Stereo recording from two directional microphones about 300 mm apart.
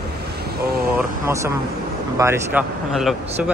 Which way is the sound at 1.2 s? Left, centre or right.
Centre.